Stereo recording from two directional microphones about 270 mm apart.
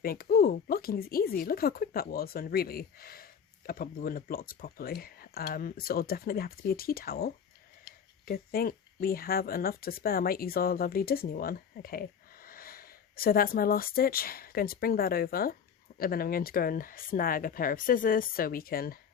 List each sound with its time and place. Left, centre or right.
0.0 s speech: left